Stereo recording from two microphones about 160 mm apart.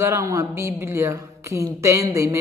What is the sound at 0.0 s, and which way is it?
Speech, 15° right (ahead or behind).